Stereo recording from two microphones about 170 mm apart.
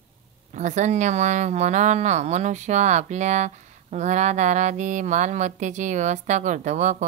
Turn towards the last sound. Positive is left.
turn(degrees=-45)  # may be behind; listen again after turning